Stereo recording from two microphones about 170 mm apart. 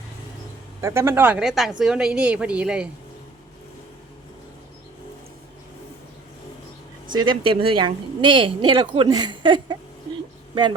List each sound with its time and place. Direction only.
0.8 s a woman's voice: 15° right (ahead or behind)
7.1 s a woman's voice: 25° right (ahead or behind)